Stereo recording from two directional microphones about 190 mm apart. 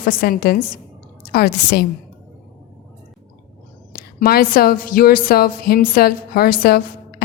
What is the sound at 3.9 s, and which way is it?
A woman's voice, 55° left (ahead or behind).